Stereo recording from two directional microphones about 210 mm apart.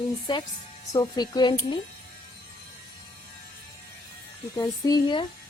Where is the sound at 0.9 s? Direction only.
20° left (ahead or behind).